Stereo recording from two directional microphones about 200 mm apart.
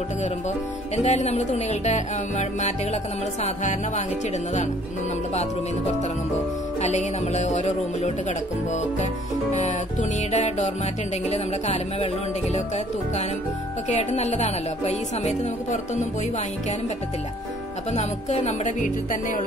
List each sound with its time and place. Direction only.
0.9 s music: 35° left (ahead or behind)
6.8 s music: 35° left (ahead or behind)
9.5 s music: 35° left (ahead or behind)
13.8 s music: 35° left (ahead or behind)
17.9 s music: 35° left (ahead or behind)